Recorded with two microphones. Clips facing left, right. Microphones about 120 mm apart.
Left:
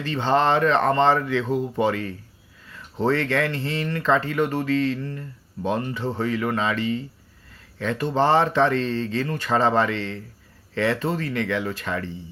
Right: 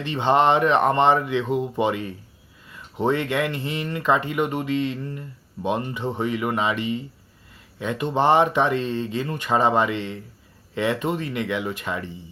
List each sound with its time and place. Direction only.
0.0 s speech: 20° right (ahead or behind)